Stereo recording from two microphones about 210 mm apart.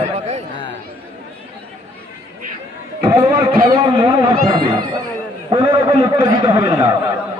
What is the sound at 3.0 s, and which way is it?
Speech, 15° right (ahead or behind).